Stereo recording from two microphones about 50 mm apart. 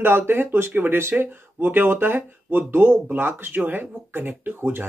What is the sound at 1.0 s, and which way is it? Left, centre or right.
Speech, right.